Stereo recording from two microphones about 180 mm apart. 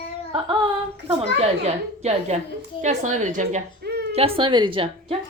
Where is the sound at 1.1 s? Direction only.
35° right (ahead or behind).